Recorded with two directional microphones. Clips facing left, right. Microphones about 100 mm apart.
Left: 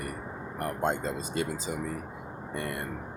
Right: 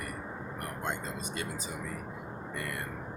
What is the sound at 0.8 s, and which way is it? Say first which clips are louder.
Speech: left 7 dB; 30° left (ahead or behind).